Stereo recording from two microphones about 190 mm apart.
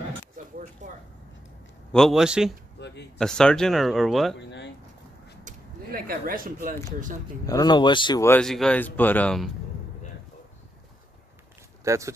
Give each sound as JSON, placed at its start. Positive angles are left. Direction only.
{"t": 0.8, "sound": "a sound", "side_deg": -40}
{"t": 1.9, "sound": "speech", "side_deg": 0}
{"t": 2.8, "sound": "a sound", "side_deg": 65}
{"t": 3.2, "sound": "speech", "side_deg": 5}
{"t": 4.4, "sound": "a sound", "side_deg": 70}
{"t": 5.4, "sound": "speech", "side_deg": -50}
{"t": 7.4, "sound": "speech", "side_deg": 20}
{"t": 8.3, "sound": "speech", "side_deg": 5}
{"t": 11.8, "sound": "speech", "side_deg": -15}